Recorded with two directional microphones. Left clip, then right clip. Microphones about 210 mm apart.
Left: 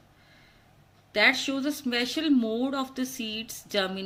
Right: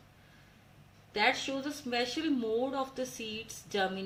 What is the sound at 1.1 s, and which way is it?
A woman's voice, 50° left (ahead or behind).